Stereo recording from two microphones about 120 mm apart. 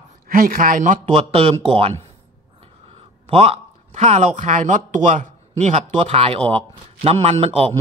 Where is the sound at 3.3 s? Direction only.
55° right (ahead or behind).